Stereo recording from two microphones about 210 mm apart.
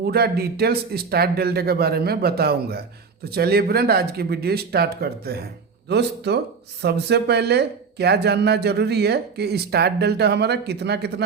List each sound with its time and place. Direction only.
0.0 s speech: 50° right (ahead or behind)